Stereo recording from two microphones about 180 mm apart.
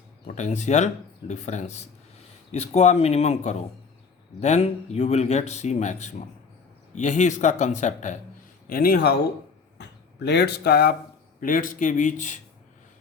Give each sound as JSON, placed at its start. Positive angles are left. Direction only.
{"t": 0.3, "sound": "speech", "side_deg": 40}
{"t": 8.7, "sound": "speech", "side_deg": 55}
{"t": 9.7, "sound": "speech", "side_deg": 70}
{"t": 11.3, "sound": "a man's voice", "side_deg": 50}